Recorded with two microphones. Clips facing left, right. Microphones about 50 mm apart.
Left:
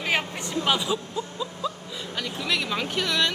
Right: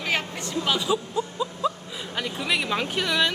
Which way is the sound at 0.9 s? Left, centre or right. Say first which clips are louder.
Right 3 dB; centre.